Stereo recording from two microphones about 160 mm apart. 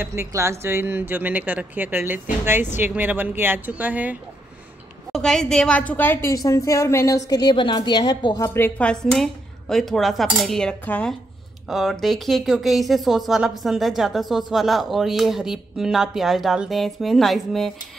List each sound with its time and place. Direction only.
0.0 s speech: 15° right (ahead or behind)
5.1 s a woman's voice: centre (ahead or behind); by 8.4 s 30° left (ahead or behind)
8.4 s speech: 15° left (ahead or behind)